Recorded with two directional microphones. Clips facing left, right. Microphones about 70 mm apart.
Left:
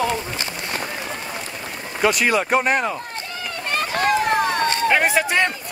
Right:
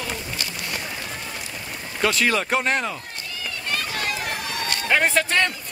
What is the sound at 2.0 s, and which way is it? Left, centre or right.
Speech, centre.